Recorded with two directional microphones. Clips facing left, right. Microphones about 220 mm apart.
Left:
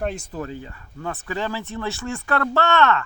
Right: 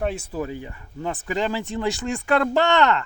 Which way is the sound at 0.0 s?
5° right (ahead or behind).